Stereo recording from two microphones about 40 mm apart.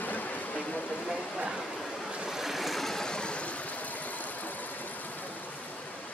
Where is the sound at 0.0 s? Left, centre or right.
Left.